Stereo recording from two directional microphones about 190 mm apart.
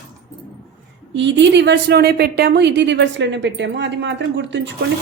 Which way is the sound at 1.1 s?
70° right (ahead or behind).